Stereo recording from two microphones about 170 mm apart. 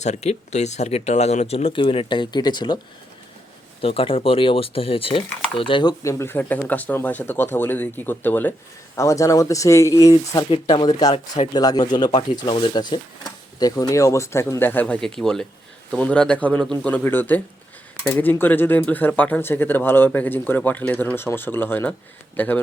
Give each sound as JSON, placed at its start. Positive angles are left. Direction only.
{"t": 0.0, "sound": "speech", "side_deg": 40}
{"t": 3.8, "sound": "speech", "side_deg": 35}